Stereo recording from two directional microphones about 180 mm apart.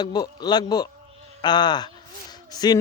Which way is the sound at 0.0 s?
20° left (ahead or behind).